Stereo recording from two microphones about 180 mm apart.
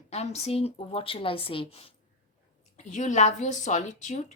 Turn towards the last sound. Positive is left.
turn(degrees=40)  # may be behind; listen again after turning